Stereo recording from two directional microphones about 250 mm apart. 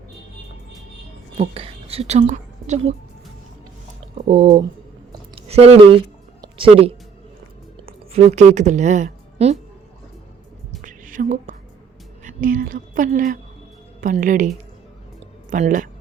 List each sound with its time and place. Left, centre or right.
1.4 s a woman's voice: right
4.1 s a woman's voice: right
10.8 s a sound: right
12.2 s a woman's voice: right